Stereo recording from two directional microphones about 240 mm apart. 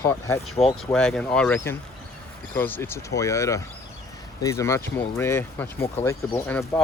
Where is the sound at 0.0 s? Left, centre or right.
Centre.